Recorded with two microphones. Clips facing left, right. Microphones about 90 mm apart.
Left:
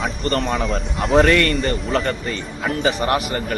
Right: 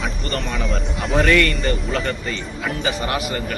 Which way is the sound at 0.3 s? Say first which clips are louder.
Left 6 dB; 40° left (ahead or behind).